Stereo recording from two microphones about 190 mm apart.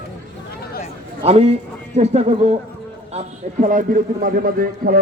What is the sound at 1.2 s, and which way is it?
Speech, 30° right (ahead or behind).